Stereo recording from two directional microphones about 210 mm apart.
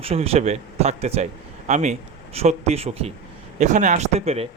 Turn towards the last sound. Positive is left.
turn(degrees=-30)  # may be behind; listen again after turning